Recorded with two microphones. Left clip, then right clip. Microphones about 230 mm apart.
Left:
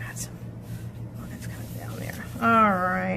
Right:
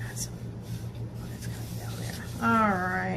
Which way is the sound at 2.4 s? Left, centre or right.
Left.